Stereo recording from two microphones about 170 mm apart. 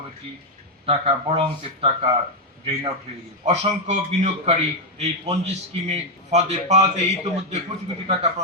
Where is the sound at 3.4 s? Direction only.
40° right (ahead or behind).